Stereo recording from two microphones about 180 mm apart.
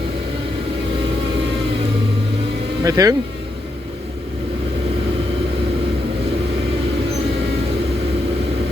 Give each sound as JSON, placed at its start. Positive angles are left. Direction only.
{"t": 2.8, "sound": "speech", "side_deg": -20}